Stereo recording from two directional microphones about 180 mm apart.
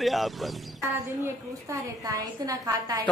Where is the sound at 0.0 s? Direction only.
Centre (ahead or behind).